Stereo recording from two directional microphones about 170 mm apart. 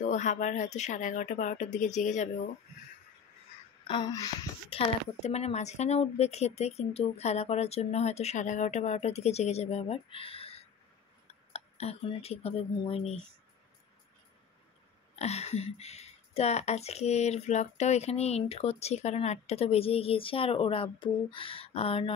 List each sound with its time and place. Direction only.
0.0 s speech: 45° left (ahead or behind)
3.8 s a woman's voice: 30° left (ahead or behind)
15.1 s a woman's voice: 40° left (ahead or behind)